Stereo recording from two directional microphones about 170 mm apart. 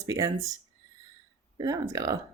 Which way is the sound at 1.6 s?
20° right (ahead or behind).